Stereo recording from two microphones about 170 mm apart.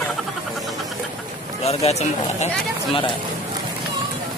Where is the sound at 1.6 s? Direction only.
40° left (ahead or behind).